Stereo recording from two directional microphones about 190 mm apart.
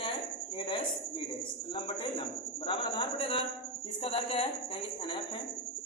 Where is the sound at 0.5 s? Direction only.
30° left (ahead or behind).